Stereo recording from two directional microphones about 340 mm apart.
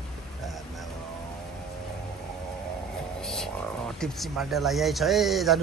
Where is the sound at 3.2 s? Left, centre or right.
Centre.